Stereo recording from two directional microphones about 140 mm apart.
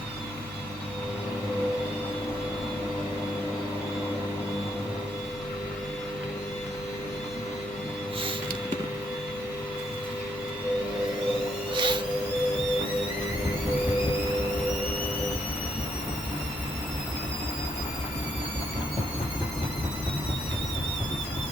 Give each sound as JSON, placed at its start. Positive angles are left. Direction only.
{"t": 11.7, "sound": "music", "side_deg": -35}